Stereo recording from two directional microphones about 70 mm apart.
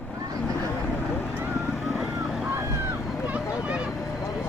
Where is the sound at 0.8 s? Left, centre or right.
Left.